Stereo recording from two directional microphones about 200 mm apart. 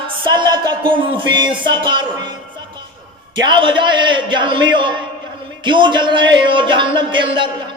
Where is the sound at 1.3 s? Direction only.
20° right (ahead or behind).